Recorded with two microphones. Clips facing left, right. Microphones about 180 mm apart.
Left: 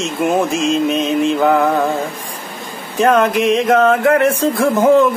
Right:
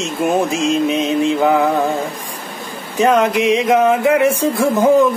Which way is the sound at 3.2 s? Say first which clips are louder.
Even; 55° left (ahead or behind).